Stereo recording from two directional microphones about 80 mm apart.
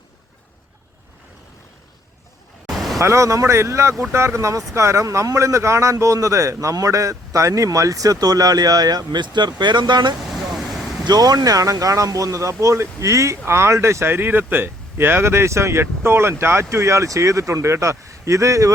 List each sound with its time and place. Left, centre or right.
2.6 s vehicle: centre
3.0 s speech: right
10.2 s vehicle: centre
11.0 s speech: right